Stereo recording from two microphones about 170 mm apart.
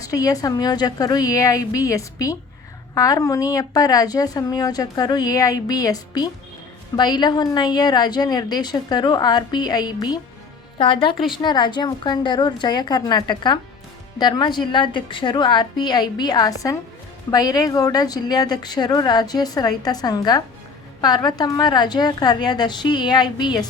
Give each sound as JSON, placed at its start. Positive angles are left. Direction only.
{"t": 0.0, "sound": "a woman's voice", "side_deg": 20}